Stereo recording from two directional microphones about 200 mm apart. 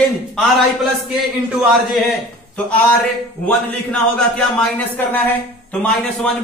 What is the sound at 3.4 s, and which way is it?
A man's voice, 5° left (ahead or behind).